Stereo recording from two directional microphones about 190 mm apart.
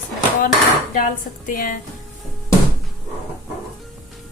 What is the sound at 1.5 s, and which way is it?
Speech, 45° left (ahead or behind).